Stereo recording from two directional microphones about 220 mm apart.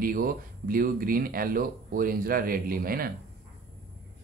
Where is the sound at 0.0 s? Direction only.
40° right (ahead or behind).